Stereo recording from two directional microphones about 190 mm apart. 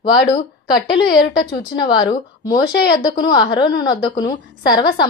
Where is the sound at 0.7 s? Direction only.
55° left (ahead or behind).